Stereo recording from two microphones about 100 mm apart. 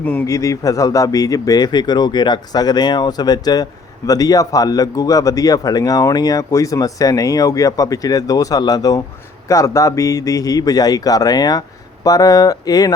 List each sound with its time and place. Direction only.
0.0 s a man's voice: 15° left (ahead or behind)
0.3 s speech: 35° left (ahead or behind)